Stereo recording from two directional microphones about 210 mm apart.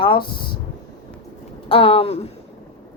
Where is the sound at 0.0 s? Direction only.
20° left (ahead or behind).